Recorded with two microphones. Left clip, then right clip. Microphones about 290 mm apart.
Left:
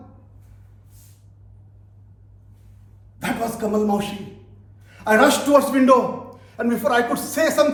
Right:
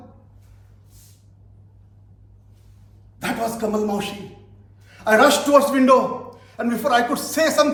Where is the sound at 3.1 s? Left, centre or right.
Centre.